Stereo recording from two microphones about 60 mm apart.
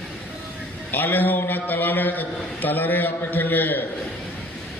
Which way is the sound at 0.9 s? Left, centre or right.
Left.